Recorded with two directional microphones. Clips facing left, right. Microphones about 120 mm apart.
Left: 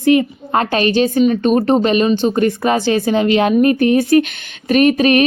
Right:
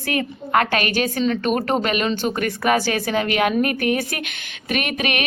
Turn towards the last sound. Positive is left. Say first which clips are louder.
# left 12 dB
turn(degrees=35)  # may be behind; listen again after turning